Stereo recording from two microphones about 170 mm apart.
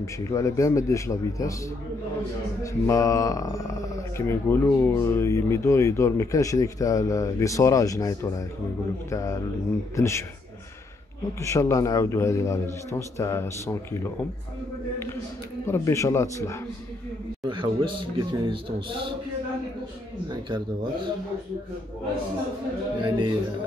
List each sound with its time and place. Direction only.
0.0 s speech: 20° left (ahead or behind)
2.6 s a man's voice: 20° left (ahead or behind)
11.4 s a man's voice: 20° left (ahead or behind)
15.6 s a man's voice: 15° left (ahead or behind)
17.5 s speech: 30° right (ahead or behind)
20.2 s speech: 30° right (ahead or behind)
23.0 s speech: 30° right (ahead or behind)